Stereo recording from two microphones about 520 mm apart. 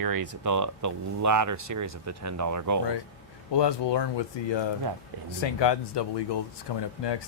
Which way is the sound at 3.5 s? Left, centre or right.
Left.